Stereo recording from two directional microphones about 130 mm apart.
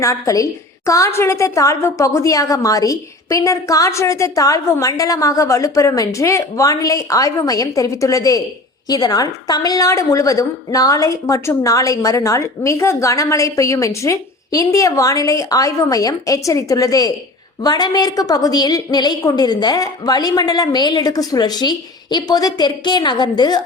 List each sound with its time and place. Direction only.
0.0 s a woman's voice: 25° left (ahead or behind)